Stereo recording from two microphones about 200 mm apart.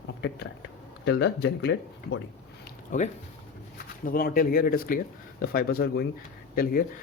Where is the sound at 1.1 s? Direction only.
60° left (ahead or behind).